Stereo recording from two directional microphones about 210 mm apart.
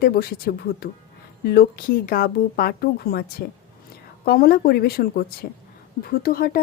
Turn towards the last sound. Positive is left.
turn(degrees=45)  # may be behind; listen again after turning